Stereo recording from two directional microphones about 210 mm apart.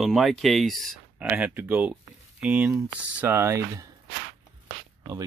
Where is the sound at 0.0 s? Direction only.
Centre (ahead or behind).